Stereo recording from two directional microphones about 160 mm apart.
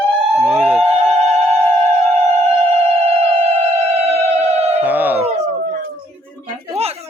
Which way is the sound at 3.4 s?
40° right (ahead or behind).